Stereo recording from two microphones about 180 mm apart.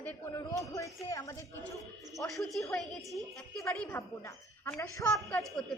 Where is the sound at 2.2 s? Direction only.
Centre (ahead or behind).